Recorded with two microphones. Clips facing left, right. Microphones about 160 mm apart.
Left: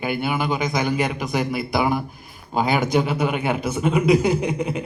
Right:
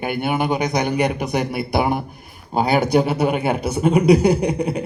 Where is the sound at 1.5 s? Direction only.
55° right (ahead or behind).